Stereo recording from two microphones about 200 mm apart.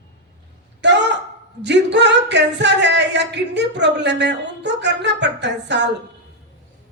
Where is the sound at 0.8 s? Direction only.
60° right (ahead or behind).